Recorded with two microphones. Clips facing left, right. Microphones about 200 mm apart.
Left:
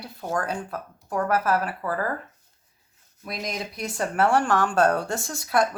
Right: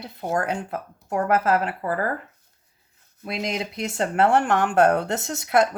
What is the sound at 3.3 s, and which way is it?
Speech, 25° right (ahead or behind).